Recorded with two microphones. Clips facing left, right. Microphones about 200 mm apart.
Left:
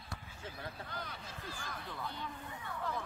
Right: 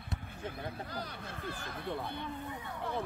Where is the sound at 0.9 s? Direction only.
35° right (ahead or behind).